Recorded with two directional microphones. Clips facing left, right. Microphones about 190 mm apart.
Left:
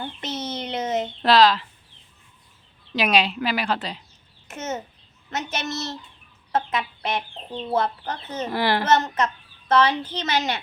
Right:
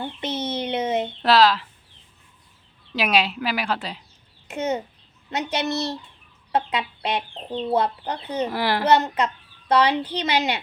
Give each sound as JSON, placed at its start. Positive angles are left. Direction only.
{"t": 0.3, "sound": "a sound", "side_deg": -30}
{"t": 0.8, "sound": "speech", "side_deg": -10}
{"t": 2.9, "sound": "a child's voice", "side_deg": -5}
{"t": 5.6, "sound": "a child's voice", "side_deg": -35}
{"t": 6.5, "sound": "speech", "side_deg": -15}